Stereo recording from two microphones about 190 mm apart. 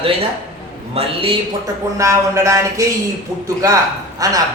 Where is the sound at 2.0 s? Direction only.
15° right (ahead or behind).